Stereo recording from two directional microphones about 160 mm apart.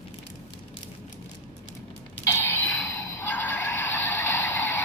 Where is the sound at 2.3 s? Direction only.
15° left (ahead or behind).